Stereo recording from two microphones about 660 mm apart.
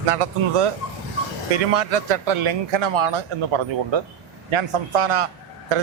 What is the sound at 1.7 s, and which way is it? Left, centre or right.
A man's voice, right.